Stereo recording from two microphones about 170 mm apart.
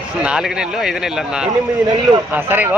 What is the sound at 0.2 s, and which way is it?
Speech, 5° right (ahead or behind).